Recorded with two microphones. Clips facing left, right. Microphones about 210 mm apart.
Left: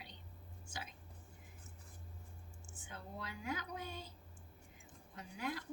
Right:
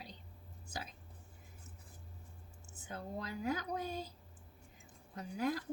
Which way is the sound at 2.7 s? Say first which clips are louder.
Right 6 dB; 40° right (ahead or behind).